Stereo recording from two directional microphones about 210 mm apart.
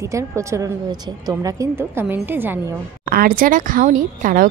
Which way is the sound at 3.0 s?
45° right (ahead or behind).